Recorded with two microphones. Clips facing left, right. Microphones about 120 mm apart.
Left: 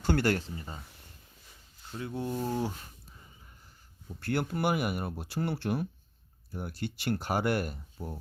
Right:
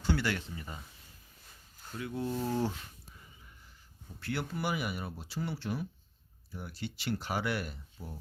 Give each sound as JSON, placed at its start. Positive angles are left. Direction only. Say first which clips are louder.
{"t": 0.0, "sound": "speech", "louder": "left 5 dB", "side_deg": 50}
{"t": 0.4, "sound": "speech", "louder": "left 2 dB", "side_deg": 30}
{"t": 2.0, "sound": "speech", "louder": "left 1 dB", "side_deg": 30}
{"t": 2.2, "sound": "speech", "louder": "even", "side_deg": 15}
{"t": 4.2, "sound": "speech", "louder": "left 5 dB", "side_deg": 50}